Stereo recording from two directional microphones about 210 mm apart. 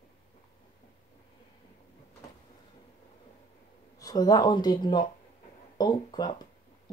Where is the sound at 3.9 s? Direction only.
15° left (ahead or behind).